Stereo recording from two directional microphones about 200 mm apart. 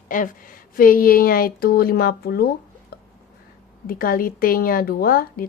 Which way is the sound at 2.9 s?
50° left (ahead or behind).